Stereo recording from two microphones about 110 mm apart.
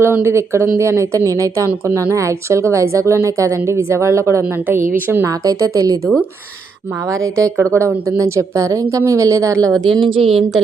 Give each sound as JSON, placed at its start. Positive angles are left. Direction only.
{"t": 0.0, "sound": "speech", "side_deg": -20}
{"t": 5.2, "sound": "speech", "side_deg": -30}
{"t": 7.3, "sound": "speech", "side_deg": -25}
{"t": 9.7, "sound": "a woman's voice", "side_deg": 0}
{"t": 10.0, "sound": "a woman's voice", "side_deg": -55}